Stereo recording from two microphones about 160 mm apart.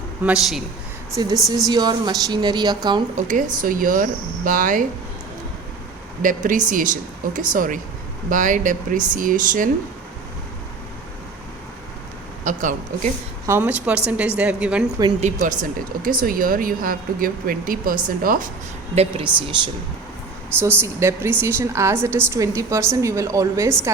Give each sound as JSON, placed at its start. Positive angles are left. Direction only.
{"t": 0.3, "sound": "a man's voice", "side_deg": 0}
{"t": 1.1, "sound": "a woman's voice", "side_deg": -20}
{"t": 3.2, "sound": "speech", "side_deg": -50}
{"t": 6.2, "sound": "speech", "side_deg": -55}
{"t": 12.5, "sound": "speech", "side_deg": -55}
{"t": 13.5, "sound": "a woman's voice", "side_deg": -10}
{"t": 15.2, "sound": "speech", "side_deg": -50}
{"t": 18.9, "sound": "speech", "side_deg": -35}
{"t": 20.6, "sound": "a woman's voice", "side_deg": -15}